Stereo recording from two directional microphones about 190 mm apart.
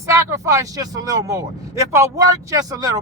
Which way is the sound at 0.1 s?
15° right (ahead or behind).